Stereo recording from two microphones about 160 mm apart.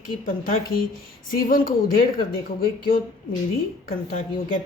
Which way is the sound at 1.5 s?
60° left (ahead or behind).